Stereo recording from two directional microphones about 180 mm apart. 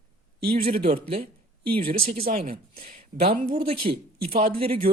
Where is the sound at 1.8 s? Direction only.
55° right (ahead or behind).